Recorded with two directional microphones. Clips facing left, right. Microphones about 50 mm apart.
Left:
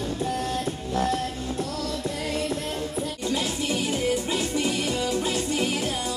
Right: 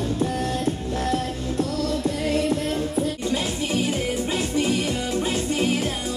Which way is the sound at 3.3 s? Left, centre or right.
Centre.